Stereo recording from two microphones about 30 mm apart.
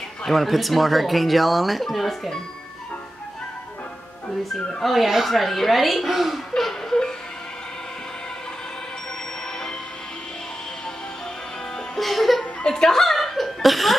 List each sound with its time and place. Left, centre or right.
0.2 s speech: centre
4.8 s speech: centre
12.0 s music: centre
12.6 s speech: left
12.9 s laughter: centre